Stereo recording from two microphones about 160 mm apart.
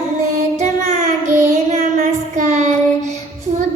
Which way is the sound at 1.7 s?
50° right (ahead or behind).